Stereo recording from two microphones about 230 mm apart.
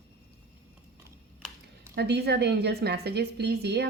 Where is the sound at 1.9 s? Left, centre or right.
Right.